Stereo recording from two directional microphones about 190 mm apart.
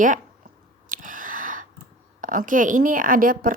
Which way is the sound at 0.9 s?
45° right (ahead or behind).